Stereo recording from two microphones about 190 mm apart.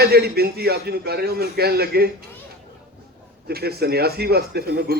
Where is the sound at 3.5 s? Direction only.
55° right (ahead or behind).